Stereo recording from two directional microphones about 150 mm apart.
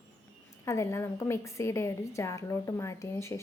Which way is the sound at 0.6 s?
20° left (ahead or behind).